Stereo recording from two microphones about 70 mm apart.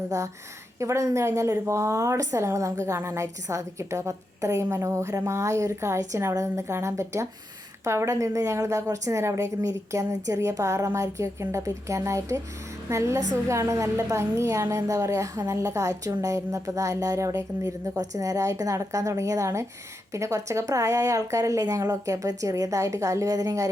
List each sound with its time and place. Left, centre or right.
0.8 s a woman's voice: right